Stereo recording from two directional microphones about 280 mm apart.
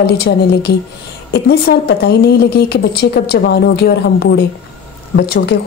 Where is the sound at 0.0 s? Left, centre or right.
Left.